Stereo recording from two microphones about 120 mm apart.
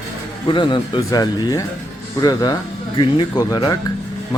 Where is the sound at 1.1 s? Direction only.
30° left (ahead or behind).